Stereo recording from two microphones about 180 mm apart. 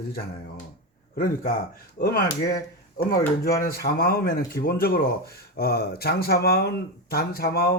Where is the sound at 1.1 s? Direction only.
55° left (ahead or behind).